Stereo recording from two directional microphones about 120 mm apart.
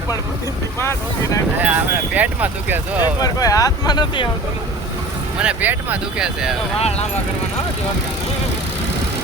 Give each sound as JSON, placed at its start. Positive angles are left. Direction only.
{"t": 0.8, "sound": "speech", "side_deg": 20}
{"t": 1.6, "sound": "speech", "side_deg": -15}
{"t": 3.0, "sound": "speech", "side_deg": 30}
{"t": 5.4, "sound": "speech", "side_deg": -10}
{"t": 6.7, "sound": "speech", "side_deg": 60}